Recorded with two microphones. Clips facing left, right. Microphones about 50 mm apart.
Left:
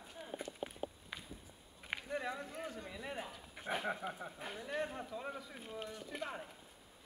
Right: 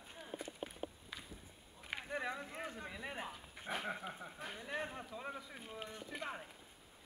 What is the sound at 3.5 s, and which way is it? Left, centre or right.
Speech, centre.